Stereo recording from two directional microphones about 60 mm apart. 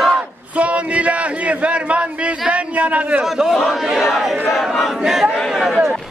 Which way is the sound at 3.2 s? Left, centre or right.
Centre.